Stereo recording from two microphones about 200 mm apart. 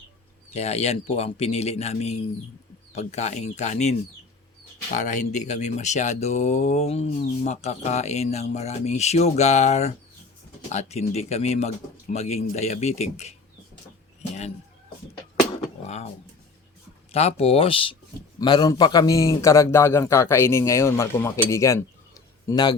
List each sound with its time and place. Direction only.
0.5 s speech: 30° left (ahead or behind)
17.1 s a man's voice: 30° left (ahead or behind)